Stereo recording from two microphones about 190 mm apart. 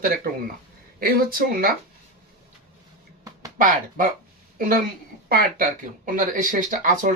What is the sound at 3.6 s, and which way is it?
Speech, 45° right (ahead or behind).